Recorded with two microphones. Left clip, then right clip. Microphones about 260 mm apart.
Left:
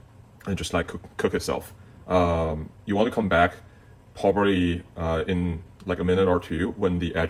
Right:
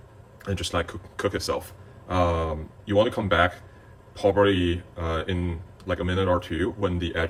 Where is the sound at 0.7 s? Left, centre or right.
Centre.